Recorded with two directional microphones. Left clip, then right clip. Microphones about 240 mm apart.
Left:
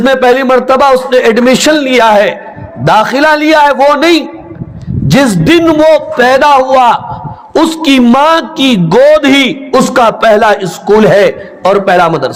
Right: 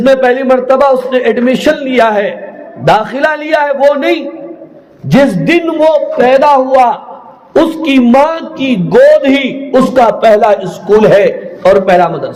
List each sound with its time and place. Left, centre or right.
0.0 s a man's voice: left